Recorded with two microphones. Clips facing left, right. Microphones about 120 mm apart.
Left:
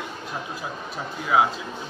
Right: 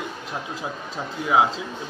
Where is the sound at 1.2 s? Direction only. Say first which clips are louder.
Right 1 dB; 25° right (ahead or behind).